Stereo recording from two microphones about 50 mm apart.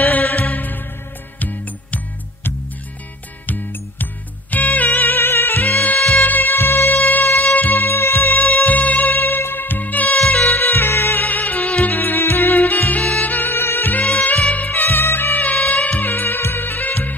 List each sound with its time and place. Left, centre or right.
0.0 s music: left
4.0 s music: left
11.2 s music: left